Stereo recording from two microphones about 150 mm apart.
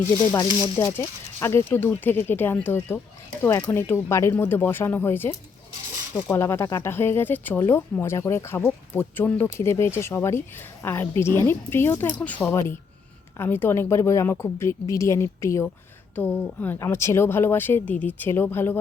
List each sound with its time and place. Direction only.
0.8 s a woman's voice: 15° left (ahead or behind)